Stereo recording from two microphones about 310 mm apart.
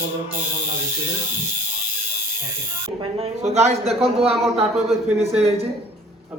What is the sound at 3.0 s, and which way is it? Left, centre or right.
A man's voice, centre.